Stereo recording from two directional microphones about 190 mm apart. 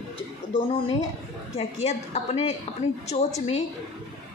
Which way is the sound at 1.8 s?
35° left (ahead or behind).